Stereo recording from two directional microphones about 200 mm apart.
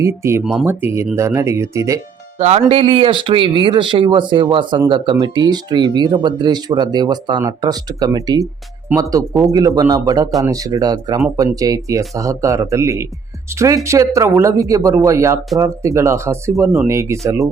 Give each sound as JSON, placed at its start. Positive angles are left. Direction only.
{"t": 0.0, "sound": "speech", "side_deg": -15}
{"t": 2.4, "sound": "speech", "side_deg": -30}